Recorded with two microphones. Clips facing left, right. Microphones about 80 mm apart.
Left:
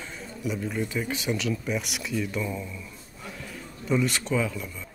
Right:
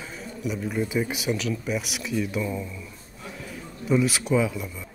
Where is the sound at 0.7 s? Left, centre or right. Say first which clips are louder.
Right 3 dB; centre.